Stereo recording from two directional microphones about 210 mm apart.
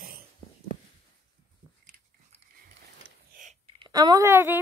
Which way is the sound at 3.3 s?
35° right (ahead or behind).